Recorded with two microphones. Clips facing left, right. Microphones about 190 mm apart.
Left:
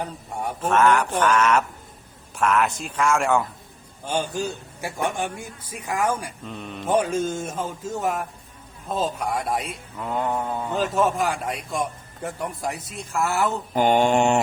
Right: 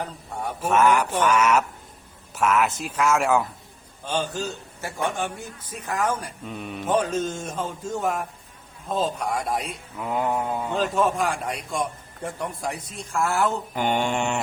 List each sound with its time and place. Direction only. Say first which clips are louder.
0.6 s mantra: even; 10° right (ahead or behind)
2.3 s a man's voice: even; 5° right (ahead or behind)
4.0 s a man's voice: left 1 dB; 10° left (ahead or behind)
6.4 s mantra: right 1 dB; 5° right (ahead or behind)
6.8 s a man's voice: left 2 dB; 10° left (ahead or behind)
13.7 s mantra: left 8 dB; 40° left (ahead or behind)